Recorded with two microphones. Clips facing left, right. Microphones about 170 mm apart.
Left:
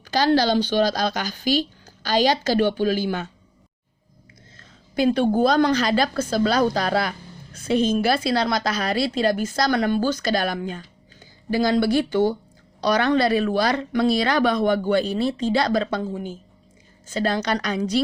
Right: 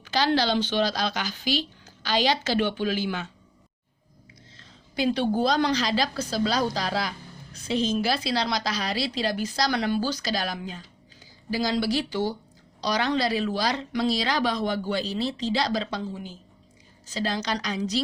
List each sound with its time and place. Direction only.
0.0 s a woman's voice: 40° left (ahead or behind)
4.5 s a woman's voice: 50° left (ahead or behind)